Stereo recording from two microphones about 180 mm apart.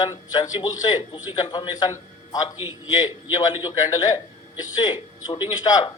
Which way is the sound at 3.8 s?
20° left (ahead or behind).